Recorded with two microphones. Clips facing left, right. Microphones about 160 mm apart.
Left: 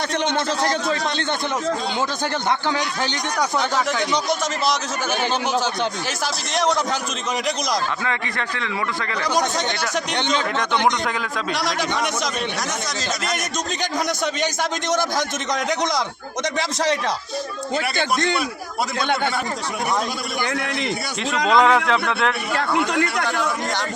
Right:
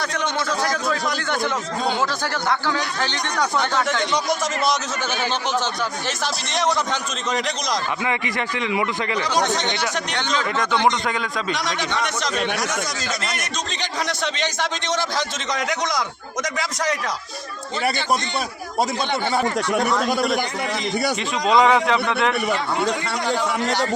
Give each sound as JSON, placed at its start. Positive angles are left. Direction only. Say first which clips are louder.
{"t": 2.5, "sound": "a man's voice", "louder": "even", "side_deg": 20}
{"t": 3.6, "sound": "speech", "louder": "even", "side_deg": 5}
{"t": 6.1, "sound": "speech", "louder": "even", "side_deg": 0}
{"t": 8.0, "sound": "speech", "louder": "right 2 dB", "side_deg": -15}
{"t": 9.3, "sound": "a man's voice", "louder": "left 1 dB", "side_deg": 10}
{"t": 11.0, "sound": "a man's voice", "louder": "even", "side_deg": 0}
{"t": 14.3, "sound": "a man's voice", "louder": "left 2 dB", "side_deg": 10}
{"t": 16.6, "sound": "speech", "louder": "left 4 dB", "side_deg": 30}
{"t": 20.1, "sound": "a man's voice", "louder": "right 7 dB", "side_deg": -65}
{"t": 21.4, "sound": "speech", "louder": "even", "side_deg": 0}
{"t": 22.9, "sound": "a man's voice", "louder": "left 2 dB", "side_deg": 65}